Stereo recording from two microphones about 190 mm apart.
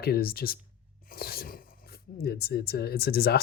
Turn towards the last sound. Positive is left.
turn(degrees=55)  # may be behind; listen again after turning